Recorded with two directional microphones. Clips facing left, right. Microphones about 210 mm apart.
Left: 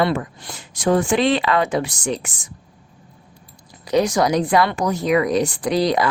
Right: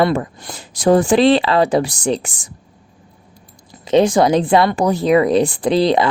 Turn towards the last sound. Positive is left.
turn(degrees=-30)  # may be behind; listen again after turning